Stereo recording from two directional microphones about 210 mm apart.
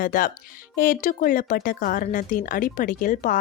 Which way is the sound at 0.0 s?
40° left (ahead or behind).